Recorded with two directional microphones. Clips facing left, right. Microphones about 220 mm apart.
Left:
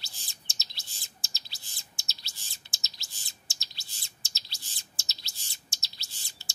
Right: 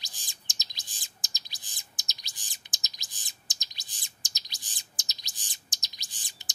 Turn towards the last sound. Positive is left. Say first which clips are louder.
# even
turn(degrees=-15)  # may be behind; listen again after turning